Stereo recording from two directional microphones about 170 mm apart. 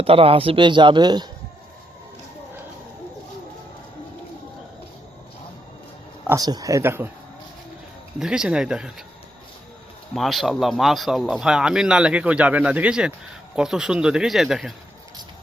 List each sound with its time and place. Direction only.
0.0 s a man's voice: 35° right (ahead or behind)
6.2 s a man's voice: 20° right (ahead or behind)
8.2 s speech: 5° right (ahead or behind)
10.2 s speech: centre (ahead or behind)